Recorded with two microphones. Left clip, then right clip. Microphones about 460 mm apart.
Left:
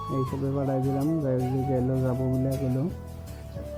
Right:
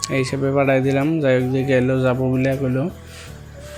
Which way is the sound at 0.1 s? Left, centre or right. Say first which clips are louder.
Right 10 dB; right.